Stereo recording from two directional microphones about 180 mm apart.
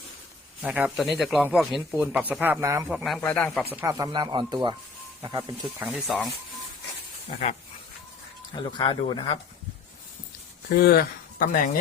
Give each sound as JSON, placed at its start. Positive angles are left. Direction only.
{"t": 0.6, "sound": "speech", "side_deg": -5}
{"t": 2.9, "sound": "speech", "side_deg": 0}
{"t": 3.2, "sound": "speech", "side_deg": 10}
{"t": 3.7, "sound": "speech", "side_deg": -15}
{"t": 5.8, "sound": "speech", "side_deg": -5}
{"t": 8.5, "sound": "speech", "side_deg": 25}
{"t": 10.8, "sound": "speech", "side_deg": 60}